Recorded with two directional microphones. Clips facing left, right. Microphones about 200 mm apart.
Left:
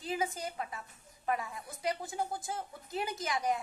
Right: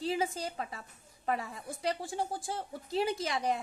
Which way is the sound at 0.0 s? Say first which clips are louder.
Right 3 dB; 30° right (ahead or behind).